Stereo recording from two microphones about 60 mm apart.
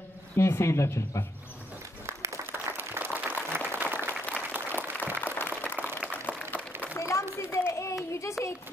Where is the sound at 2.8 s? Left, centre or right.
Right.